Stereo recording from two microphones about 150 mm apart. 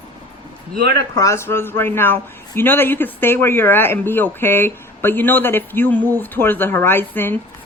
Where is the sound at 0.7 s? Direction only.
90° right.